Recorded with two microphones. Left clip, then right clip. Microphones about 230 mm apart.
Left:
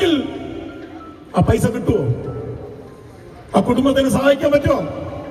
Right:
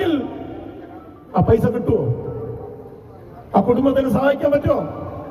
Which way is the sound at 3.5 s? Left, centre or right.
Left.